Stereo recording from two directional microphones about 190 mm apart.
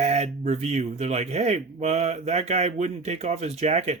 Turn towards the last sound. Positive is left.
turn(degrees=-35)  # may be behind; listen again after turning